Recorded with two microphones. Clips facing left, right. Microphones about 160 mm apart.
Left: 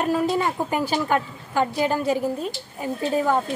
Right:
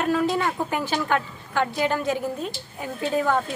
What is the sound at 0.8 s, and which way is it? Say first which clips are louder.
A woman's voice: left 2 dB; 10° left (ahead or behind).